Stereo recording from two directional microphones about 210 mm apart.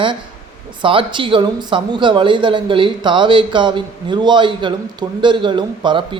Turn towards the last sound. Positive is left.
turn(degrees=-20)  # may be behind; listen again after turning